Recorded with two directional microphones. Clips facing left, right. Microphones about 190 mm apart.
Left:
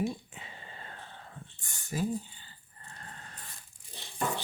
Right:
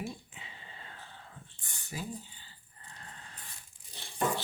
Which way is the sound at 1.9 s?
50° left (ahead or behind).